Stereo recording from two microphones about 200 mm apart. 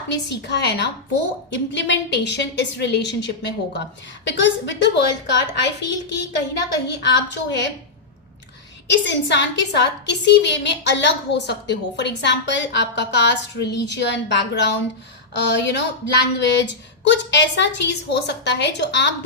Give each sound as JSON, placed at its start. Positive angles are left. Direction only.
{"t": 0.1, "sound": "a woman's voice", "side_deg": 60}
{"t": 9.0, "sound": "a woman's voice", "side_deg": 65}